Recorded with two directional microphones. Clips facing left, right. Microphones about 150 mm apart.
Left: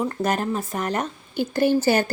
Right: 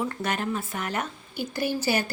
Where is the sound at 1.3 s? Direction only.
55° left (ahead or behind).